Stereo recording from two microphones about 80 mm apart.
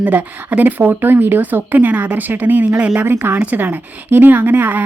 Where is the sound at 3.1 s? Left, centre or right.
Right.